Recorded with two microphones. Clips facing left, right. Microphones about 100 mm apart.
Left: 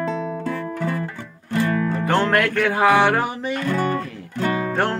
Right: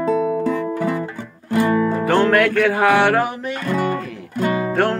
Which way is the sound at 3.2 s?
Centre (ahead or behind).